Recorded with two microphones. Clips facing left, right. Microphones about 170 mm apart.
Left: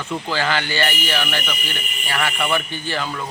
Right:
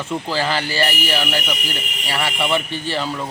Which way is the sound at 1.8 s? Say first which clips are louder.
Right 2 dB; 90° right.